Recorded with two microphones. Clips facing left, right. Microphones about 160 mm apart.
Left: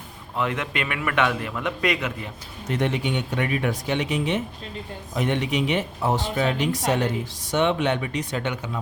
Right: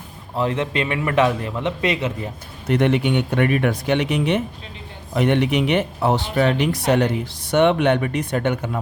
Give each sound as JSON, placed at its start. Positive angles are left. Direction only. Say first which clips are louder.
{"t": 0.3, "sound": "a man's voice", "louder": "right 5 dB", "side_deg": -30}
{"t": 2.6, "sound": "speech", "louder": "right 7 dB", "side_deg": -65}